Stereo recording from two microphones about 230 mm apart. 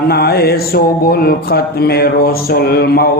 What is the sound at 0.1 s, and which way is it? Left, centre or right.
Speech, left.